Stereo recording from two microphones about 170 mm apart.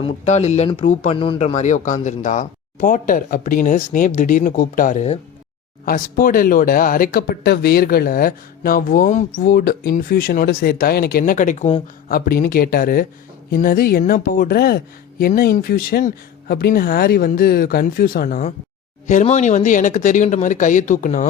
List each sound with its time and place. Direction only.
0.0 s speech: 40° left (ahead or behind)
5.8 s speech: 55° left (ahead or behind)
9.4 s speech: 65° left (ahead or behind); by 12.1 s 40° left (ahead or behind)
12.1 s speech: 60° left (ahead or behind)